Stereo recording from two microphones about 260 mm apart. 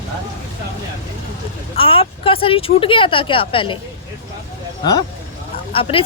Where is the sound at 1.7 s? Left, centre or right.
Left.